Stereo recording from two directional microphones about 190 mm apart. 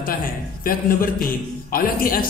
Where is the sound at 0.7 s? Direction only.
50° left (ahead or behind).